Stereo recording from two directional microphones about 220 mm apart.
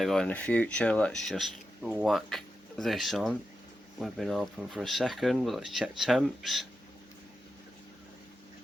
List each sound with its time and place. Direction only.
0.0 s speech: centre (ahead or behind)